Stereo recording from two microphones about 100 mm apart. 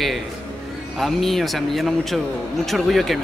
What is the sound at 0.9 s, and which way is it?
Speech, centre (ahead or behind).